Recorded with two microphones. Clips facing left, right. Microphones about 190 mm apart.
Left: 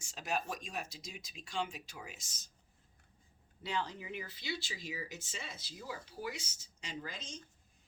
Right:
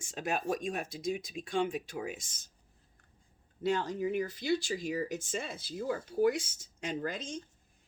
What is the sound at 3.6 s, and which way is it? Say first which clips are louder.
Speech: right 9 dB; 45° right (ahead or behind).